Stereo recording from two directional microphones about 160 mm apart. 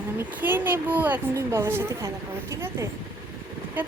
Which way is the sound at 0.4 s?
10° right (ahead or behind).